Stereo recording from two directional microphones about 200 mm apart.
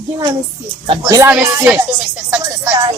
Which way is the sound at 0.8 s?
25° right (ahead or behind).